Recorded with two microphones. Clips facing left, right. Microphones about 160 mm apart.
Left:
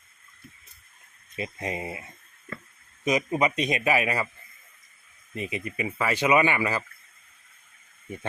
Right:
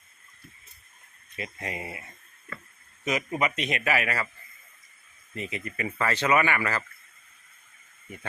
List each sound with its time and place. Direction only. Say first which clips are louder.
1.4 s speech: left 4 dB; 20° left (ahead or behind)
5.3 s speech: left 3 dB; 20° left (ahead or behind)